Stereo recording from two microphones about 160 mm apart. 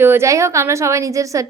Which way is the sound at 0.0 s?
15° right (ahead or behind).